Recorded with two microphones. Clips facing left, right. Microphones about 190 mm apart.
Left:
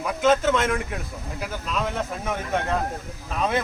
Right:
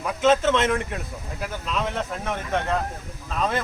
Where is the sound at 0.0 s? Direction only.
Centre (ahead or behind).